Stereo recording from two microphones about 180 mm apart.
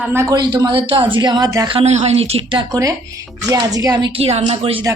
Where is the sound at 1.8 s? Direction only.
40° right (ahead or behind).